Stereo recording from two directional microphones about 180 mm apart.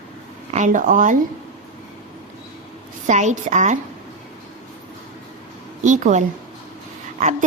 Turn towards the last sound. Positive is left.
turn(degrees=-45)  # may be behind; listen again after turning